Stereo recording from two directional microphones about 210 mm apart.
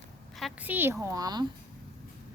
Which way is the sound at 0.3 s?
5° right (ahead or behind).